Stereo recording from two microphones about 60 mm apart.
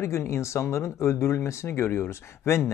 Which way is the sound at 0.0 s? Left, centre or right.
Left.